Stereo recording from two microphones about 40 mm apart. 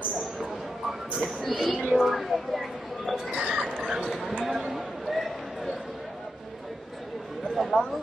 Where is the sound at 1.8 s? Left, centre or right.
Centre.